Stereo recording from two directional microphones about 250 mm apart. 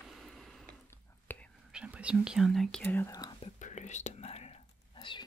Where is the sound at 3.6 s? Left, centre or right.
Left.